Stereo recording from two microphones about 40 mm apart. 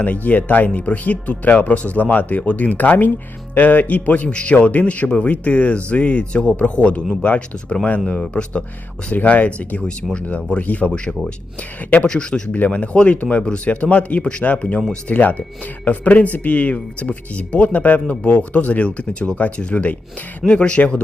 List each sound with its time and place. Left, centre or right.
0.0 s speech: left
4.3 s a man's voice: left